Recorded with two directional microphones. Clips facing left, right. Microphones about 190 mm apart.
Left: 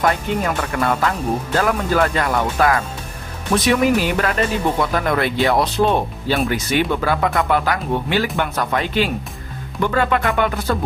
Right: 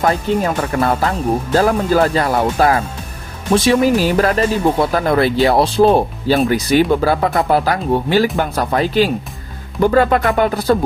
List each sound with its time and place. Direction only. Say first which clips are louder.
0.0 s speech: right 3 dB; 30° right (ahead or behind)